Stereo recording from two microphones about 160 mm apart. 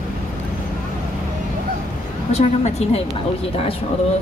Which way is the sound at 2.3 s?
40° left (ahead or behind).